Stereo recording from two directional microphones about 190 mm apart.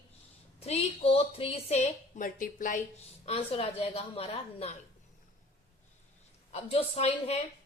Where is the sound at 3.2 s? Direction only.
30° left (ahead or behind).